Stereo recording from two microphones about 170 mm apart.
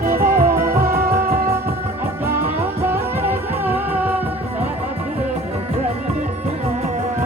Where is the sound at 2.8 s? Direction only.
10° right (ahead or behind).